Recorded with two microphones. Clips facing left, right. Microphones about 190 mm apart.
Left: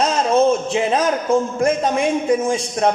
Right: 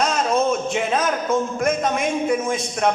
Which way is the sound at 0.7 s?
30° left (ahead or behind).